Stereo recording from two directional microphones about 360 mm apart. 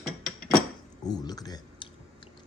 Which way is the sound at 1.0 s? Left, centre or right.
Centre.